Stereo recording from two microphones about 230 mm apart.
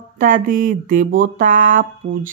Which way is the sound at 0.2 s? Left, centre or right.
Right.